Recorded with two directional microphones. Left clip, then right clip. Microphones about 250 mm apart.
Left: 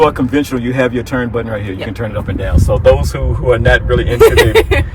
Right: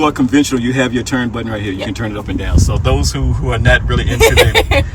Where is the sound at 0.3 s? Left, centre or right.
Centre.